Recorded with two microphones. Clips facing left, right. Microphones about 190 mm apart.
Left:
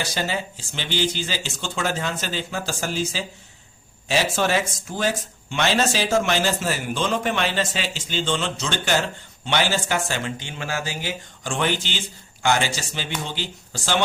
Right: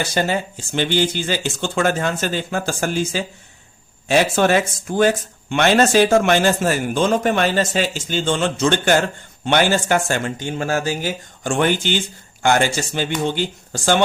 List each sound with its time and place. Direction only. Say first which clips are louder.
0.0 s speech: right 6 dB; 50° right (ahead or behind)